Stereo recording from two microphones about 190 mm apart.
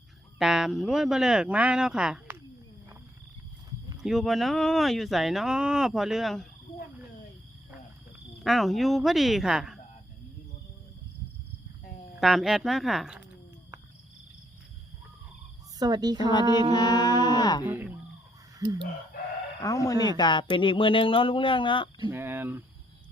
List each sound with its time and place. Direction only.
0.3 s speech: centre (ahead or behind)
3.9 s speech: centre (ahead or behind)
8.4 s speech: centre (ahead or behind)
12.2 s speech: centre (ahead or behind)
15.8 s a woman's voice: 20° right (ahead or behind)
16.7 s speech: 20° left (ahead or behind)
17.7 s speech: 10° right (ahead or behind)
19.6 s speech: 15° left (ahead or behind)
22.1 s speech: 10° right (ahead or behind)